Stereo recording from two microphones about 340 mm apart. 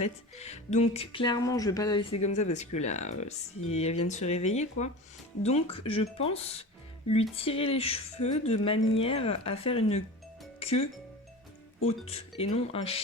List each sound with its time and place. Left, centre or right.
0.0 s speech: centre
11.9 s speech: centre